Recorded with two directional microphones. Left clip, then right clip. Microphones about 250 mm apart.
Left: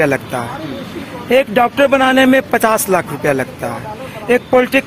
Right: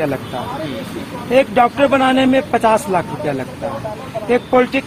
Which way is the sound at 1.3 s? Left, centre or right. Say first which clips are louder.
Left 1 dB; left.